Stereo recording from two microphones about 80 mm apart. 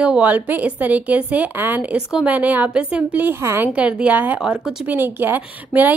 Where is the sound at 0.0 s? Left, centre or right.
Centre.